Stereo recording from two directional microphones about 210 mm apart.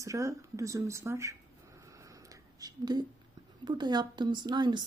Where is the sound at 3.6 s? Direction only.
20° right (ahead or behind).